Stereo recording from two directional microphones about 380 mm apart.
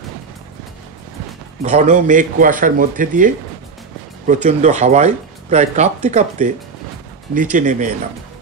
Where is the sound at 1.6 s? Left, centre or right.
Centre.